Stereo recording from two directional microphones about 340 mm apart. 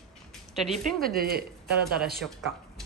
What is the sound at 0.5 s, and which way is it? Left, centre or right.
Speech, centre.